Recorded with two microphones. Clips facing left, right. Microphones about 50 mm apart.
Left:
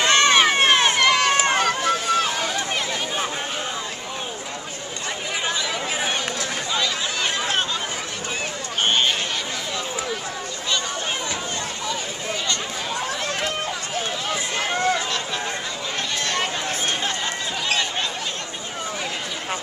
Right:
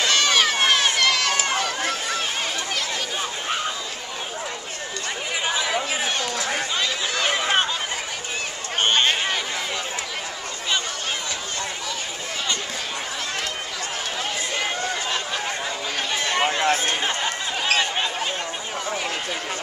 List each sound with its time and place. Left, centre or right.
0.0 s run: left
1.5 s run: left
5.4 s chatter: centre
7.2 s a sound: centre
16.2 s a sound: centre
16.6 s chatter: right